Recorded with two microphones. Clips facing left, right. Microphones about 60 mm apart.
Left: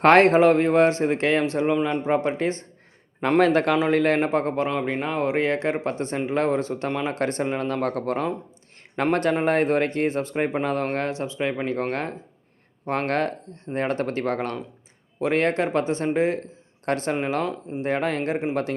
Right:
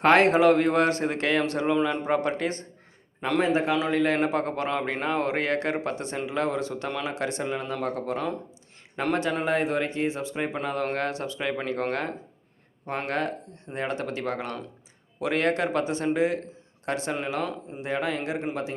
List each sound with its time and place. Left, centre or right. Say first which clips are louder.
0.0 s a man's voice: left 3 dB; left
3.4 s speech: left 4 dB; left
3.9 s speech: left 3 dB; left
4.9 s speech: left 2 dB; centre; by 9.1 s left
9.3 s speech: left 5 dB; left
12.9 s speech: left 5 dB; left